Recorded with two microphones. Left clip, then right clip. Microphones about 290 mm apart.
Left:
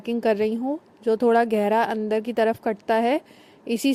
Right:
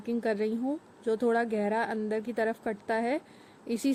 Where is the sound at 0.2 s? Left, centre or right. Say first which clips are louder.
Left 9 dB; left.